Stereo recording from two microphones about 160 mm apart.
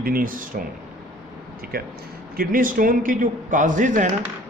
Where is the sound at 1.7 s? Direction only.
70° right (ahead or behind).